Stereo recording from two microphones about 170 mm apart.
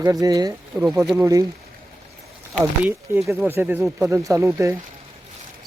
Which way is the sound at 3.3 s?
10° right (ahead or behind).